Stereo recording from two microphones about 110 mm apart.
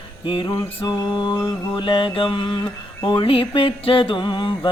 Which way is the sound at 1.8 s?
50° left (ahead or behind).